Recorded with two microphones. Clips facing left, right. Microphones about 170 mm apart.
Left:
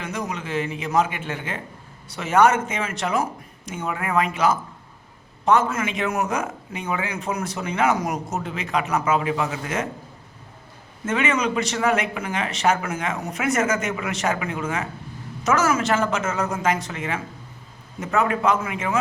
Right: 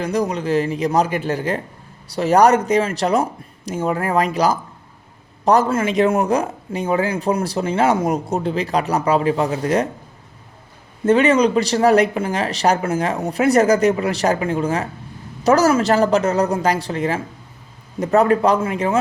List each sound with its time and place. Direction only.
0.0 s speech: 35° right (ahead or behind)
11.0 s speech: 35° right (ahead or behind)